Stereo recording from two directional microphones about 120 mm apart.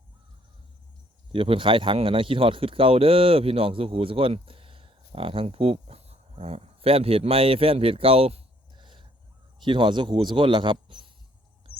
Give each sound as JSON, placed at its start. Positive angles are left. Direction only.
{"t": 1.3, "sound": "speech", "side_deg": -45}